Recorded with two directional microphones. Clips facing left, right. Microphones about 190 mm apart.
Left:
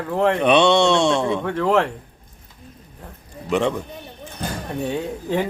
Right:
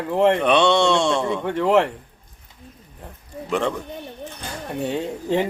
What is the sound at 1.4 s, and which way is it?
Speech, 10° right (ahead or behind).